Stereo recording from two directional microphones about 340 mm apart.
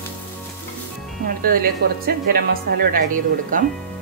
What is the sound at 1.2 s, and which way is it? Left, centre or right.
Speech, right.